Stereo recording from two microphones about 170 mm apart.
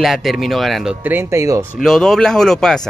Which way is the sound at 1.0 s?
15° right (ahead or behind).